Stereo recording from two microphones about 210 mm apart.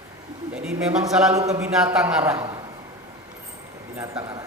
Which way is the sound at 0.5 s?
5° right (ahead or behind).